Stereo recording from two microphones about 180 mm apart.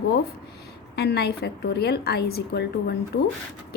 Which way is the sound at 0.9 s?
65° left (ahead or behind).